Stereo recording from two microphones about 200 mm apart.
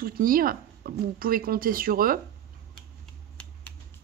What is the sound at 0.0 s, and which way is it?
Speech, 45° right (ahead or behind).